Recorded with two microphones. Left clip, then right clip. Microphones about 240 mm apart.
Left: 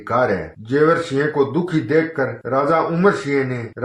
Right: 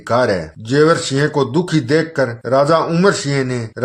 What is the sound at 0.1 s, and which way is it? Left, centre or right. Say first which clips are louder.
A man's voice: right 3 dB; right.